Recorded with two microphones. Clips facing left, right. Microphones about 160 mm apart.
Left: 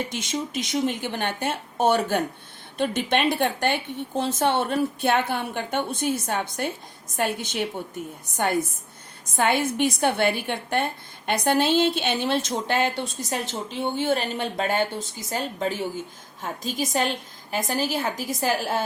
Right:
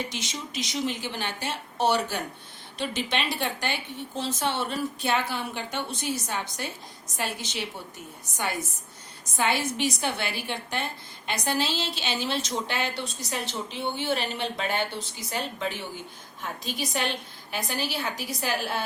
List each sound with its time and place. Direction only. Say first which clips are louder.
0.1 s a woman's voice: left 7 dB; 50° left (ahead or behind)